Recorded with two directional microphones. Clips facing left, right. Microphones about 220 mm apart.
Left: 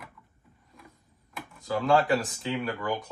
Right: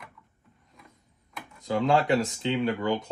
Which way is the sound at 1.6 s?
20° right (ahead or behind).